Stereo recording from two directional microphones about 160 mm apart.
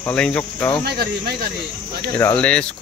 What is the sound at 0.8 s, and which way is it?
Speech, 80° right.